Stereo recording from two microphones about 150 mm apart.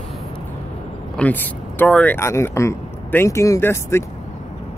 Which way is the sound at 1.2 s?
10° left (ahead or behind).